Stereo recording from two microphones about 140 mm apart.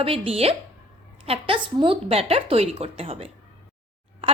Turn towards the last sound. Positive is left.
turn(degrees=-40)  # may be behind; listen again after turning